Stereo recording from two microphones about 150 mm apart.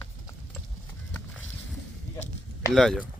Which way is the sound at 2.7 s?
Centre (ahead or behind).